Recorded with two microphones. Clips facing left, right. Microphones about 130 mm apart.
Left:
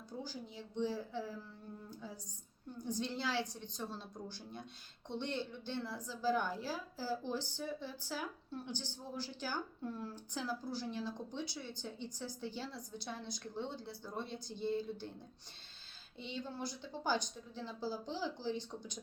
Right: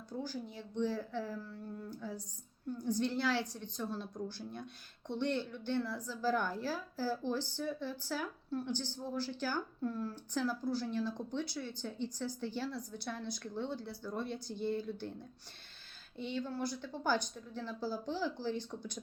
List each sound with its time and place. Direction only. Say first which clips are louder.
0.5 s speech: right 2 dB; 15° left (ahead or behind)
16.3 s speech: right 5 dB; 20° left (ahead or behind)